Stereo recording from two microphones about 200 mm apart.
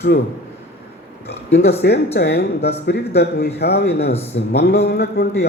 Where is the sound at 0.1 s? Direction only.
50° left (ahead or behind).